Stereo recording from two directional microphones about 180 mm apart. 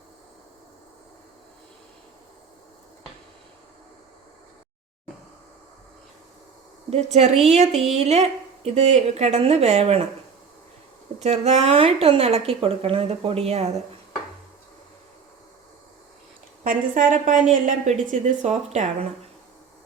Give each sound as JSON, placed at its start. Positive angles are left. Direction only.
{"t": 6.9, "sound": "speech", "side_deg": -35}
{"t": 11.2, "sound": "speech", "side_deg": -40}
{"t": 16.6, "sound": "a woman's voice", "side_deg": -45}